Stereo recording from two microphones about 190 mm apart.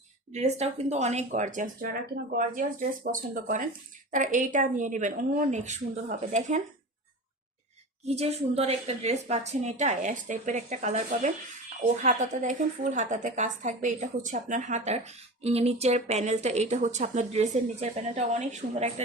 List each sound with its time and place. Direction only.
0.3 s a woman's voice: 35° right (ahead or behind)
8.0 s a woman's voice: 35° right (ahead or behind)